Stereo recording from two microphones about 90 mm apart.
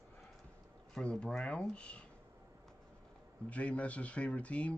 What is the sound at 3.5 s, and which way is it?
Speech, 15° left (ahead or behind).